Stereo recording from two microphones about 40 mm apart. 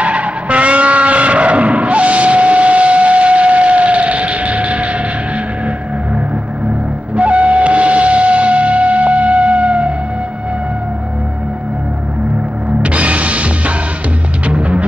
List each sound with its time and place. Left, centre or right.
0.0 s vehicle: right
7.2 s music: right
12.8 s music: right